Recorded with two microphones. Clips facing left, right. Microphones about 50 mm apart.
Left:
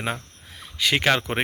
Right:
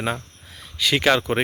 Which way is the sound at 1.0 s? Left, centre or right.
Left.